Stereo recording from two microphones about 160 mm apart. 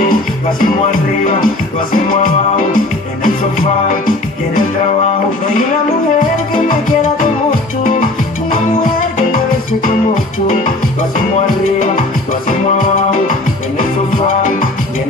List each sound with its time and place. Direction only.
1.2 s music: 60° left (ahead or behind)
8.5 s music: 60° left (ahead or behind)